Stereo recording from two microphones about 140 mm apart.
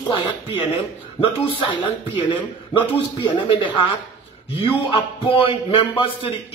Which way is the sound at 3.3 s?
35° left (ahead or behind).